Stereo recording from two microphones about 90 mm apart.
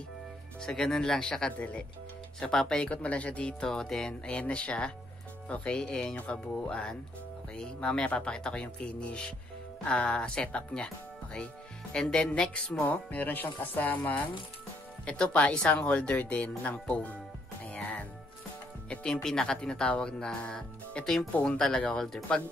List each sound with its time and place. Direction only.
0.6 s speech: 5° left (ahead or behind)
11.9 s speech: 10° left (ahead or behind)
19.2 s speech: 5° left (ahead or behind)